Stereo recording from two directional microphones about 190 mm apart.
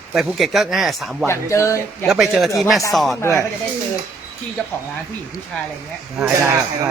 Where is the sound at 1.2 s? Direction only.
15° left (ahead or behind).